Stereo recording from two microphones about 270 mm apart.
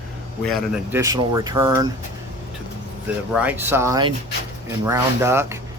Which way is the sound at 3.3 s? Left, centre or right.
Centre.